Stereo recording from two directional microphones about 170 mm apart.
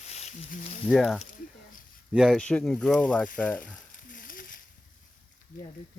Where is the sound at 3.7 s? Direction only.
55° left (ahead or behind).